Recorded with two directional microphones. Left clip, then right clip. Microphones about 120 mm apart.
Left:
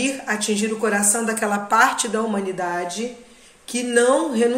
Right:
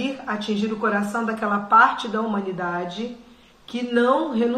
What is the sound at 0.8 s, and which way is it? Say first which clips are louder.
A woman's voice: left 2 dB; 45° left (ahead or behind).